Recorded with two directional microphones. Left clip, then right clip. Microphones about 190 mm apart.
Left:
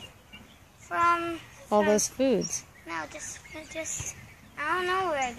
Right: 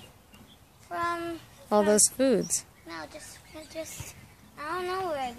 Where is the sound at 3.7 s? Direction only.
20° right (ahead or behind).